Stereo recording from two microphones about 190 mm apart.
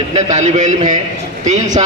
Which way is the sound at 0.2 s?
40° right (ahead or behind).